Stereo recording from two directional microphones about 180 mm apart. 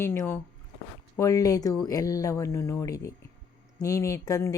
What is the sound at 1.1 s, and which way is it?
Speech, 20° left (ahead or behind).